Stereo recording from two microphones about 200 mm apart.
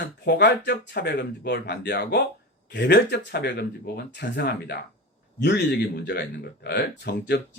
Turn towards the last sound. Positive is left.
turn(degrees=55)  # may be behind; listen again after turning